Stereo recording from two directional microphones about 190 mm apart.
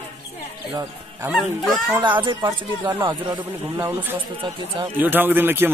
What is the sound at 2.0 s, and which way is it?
Speech, 25° right (ahead or behind).